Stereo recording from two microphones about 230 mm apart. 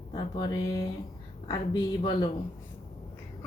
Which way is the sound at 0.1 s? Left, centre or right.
Centre.